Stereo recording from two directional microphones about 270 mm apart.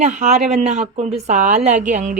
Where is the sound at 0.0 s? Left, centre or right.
Right.